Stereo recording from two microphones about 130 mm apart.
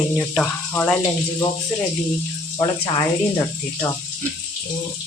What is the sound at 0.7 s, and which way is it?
Speech, 15° left (ahead or behind).